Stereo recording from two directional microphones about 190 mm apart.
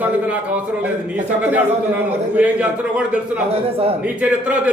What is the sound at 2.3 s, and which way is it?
A man's voice, 5° right (ahead or behind).